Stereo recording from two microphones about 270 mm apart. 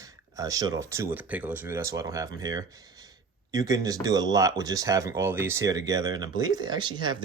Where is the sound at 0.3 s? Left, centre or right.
Centre.